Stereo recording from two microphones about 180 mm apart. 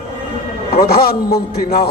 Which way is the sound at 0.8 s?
55° left (ahead or behind).